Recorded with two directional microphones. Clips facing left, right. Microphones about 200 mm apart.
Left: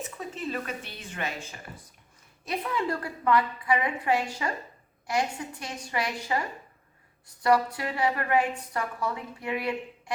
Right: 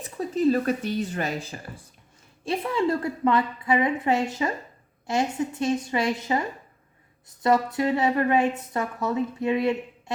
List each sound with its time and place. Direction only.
0.0 s a woman's voice: 35° right (ahead or behind)